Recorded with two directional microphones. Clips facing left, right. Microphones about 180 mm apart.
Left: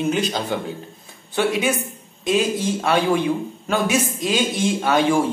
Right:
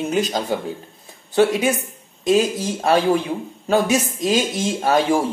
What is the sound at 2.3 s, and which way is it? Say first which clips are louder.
Speech: right 2 dB; 40° right (ahead or behind).